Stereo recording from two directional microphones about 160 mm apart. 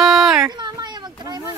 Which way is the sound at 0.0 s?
Centre (ahead or behind).